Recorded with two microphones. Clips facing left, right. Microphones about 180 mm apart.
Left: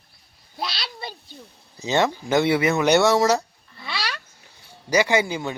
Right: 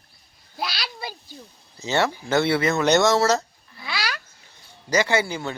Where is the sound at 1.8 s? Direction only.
15° left (ahead or behind).